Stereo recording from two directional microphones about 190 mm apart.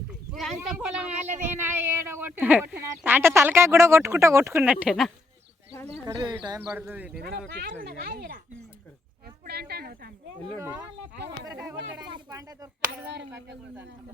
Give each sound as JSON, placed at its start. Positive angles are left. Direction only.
{"t": 0.3, "sound": "speech", "side_deg": 0}
{"t": 5.9, "sound": "speech", "side_deg": -25}
{"t": 6.7, "sound": "speech", "side_deg": -5}
{"t": 7.2, "sound": "speech", "side_deg": -55}
{"t": 9.5, "sound": "speech", "side_deg": -55}
{"t": 10.6, "sound": "speech", "side_deg": -15}
{"t": 13.1, "sound": "speech", "side_deg": -65}